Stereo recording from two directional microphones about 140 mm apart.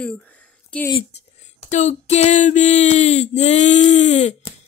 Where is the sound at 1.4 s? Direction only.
55° left (ahead or behind).